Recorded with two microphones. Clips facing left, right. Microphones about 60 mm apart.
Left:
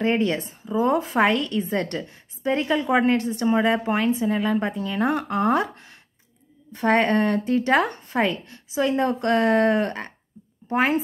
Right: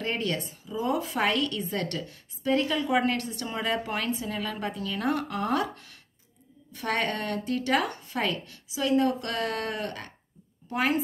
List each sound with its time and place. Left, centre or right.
0.0 s a woman's voice: left